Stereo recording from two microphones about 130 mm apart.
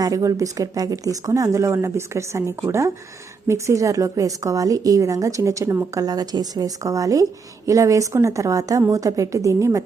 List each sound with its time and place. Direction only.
0.0 s a woman's voice: 25° right (ahead or behind)